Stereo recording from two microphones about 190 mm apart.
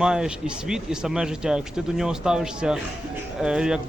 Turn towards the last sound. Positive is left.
turn(degrees=-5)  # may be behind; listen again after turning